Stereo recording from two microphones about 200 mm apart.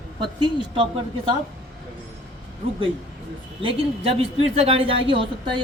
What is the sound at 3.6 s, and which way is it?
Speech, 25° right (ahead or behind).